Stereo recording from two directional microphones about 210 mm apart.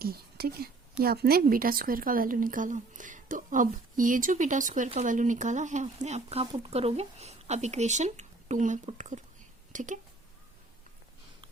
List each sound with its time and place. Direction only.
0.0 s a woman's voice: 45° right (ahead or behind)